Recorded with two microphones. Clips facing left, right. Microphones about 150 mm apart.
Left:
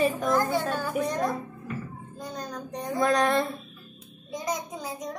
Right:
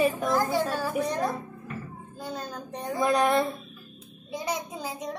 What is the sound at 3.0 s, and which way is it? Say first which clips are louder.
Speech: even; 10° right (ahead or behind).